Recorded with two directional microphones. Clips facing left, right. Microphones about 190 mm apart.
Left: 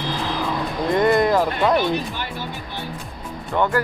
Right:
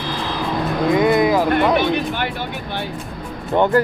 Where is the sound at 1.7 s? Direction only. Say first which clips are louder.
Right 2 dB; 65° right (ahead or behind).